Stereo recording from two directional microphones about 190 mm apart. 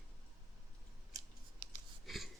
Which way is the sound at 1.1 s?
20° right (ahead or behind).